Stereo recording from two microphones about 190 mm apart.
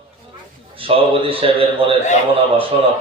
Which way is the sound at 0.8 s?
30° right (ahead or behind).